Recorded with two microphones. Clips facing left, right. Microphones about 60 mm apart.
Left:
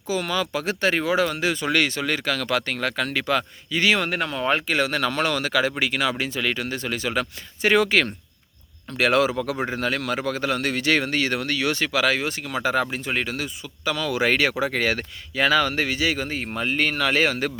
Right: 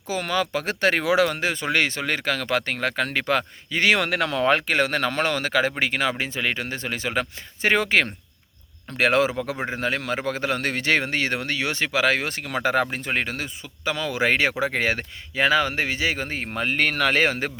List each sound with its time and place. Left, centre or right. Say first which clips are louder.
0.1 s speech: even; right
1.0 s speech: right 3 dB; right
1.3 s speech: left 1 dB; right
4.6 s a man's voice: right 1 dB; right
12.1 s a man's voice: even; right
16.6 s speech: right 1 dB; right